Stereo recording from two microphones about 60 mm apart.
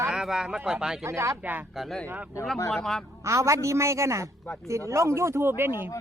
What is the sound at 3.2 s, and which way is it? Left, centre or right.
A woman's voice, right.